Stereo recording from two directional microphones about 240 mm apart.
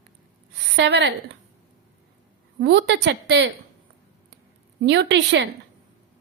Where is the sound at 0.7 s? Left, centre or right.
Right.